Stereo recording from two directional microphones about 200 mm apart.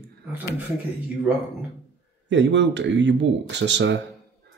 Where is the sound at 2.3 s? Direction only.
65° right (ahead or behind).